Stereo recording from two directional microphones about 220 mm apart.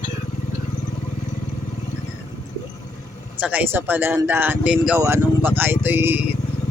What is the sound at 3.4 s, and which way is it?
Speech, 5° right (ahead or behind).